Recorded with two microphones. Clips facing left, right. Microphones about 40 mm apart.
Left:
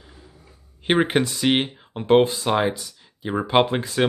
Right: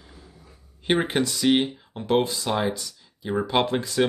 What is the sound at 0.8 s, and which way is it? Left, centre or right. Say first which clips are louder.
Speech: left 3 dB; left.